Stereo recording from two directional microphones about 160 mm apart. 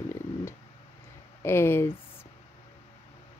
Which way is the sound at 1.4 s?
15° left (ahead or behind).